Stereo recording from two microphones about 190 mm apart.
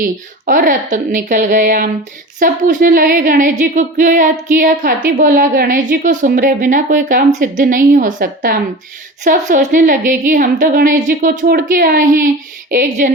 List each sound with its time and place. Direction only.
0.0 s a woman's voice: 45° right (ahead or behind)